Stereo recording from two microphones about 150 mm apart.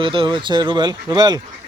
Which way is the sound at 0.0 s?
35° right (ahead or behind).